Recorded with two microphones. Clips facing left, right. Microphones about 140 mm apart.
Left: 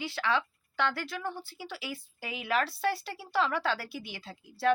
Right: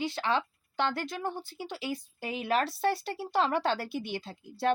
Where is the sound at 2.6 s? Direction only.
20° right (ahead or behind).